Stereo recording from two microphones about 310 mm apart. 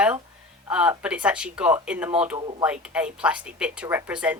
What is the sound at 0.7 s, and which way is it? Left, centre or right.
Speech, centre.